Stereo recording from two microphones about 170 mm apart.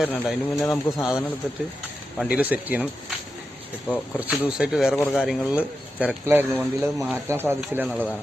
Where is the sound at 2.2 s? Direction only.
5° right (ahead or behind).